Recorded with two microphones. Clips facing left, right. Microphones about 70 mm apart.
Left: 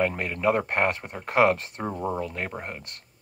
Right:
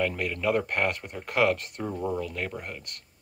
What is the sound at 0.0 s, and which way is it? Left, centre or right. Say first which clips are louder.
Speech: left 3 dB; left.